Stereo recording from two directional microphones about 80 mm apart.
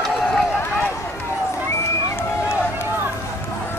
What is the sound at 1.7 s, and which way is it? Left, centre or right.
Run, left.